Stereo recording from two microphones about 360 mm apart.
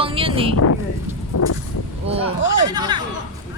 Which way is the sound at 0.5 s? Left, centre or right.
Left.